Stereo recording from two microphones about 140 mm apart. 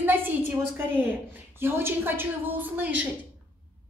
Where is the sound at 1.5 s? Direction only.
15° right (ahead or behind).